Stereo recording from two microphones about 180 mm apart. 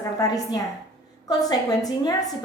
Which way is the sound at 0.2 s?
20° left (ahead or behind).